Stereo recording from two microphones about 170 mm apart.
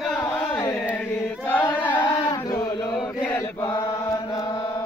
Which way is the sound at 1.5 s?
10° left (ahead or behind).